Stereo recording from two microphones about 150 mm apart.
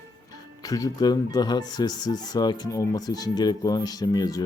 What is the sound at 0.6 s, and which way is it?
Speech, 25° left (ahead or behind).